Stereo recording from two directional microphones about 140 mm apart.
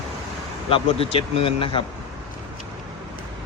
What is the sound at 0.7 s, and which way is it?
Speech, 40° left (ahead or behind).